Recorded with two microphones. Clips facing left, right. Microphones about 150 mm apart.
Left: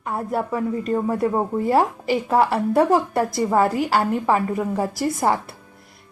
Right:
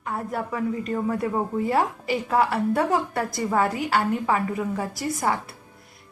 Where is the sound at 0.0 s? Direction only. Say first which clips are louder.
Left 4 dB; 30° left (ahead or behind).